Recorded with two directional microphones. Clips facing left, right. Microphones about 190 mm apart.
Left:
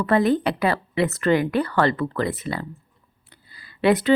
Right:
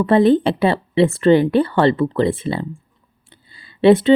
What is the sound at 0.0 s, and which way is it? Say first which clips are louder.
Speech: right 6 dB; 25° right (ahead or behind).